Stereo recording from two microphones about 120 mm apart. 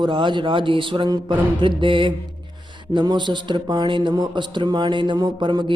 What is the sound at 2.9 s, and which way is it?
A man's voice, 40° right (ahead or behind).